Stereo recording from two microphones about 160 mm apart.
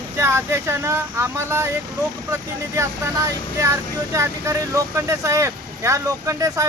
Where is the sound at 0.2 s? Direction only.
15° right (ahead or behind).